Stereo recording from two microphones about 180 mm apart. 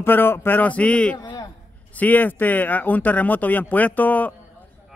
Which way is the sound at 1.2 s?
20° left (ahead or behind).